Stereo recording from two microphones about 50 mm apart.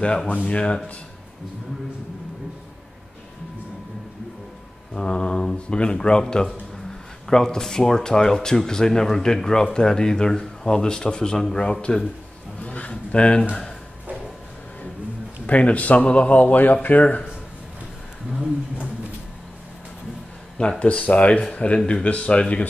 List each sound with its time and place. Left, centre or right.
0.5 s speech: left
4.9 s speech: centre
7.2 s speech: centre
12.6 s a sound: left
15.4 s speech: left
20.6 s speech: left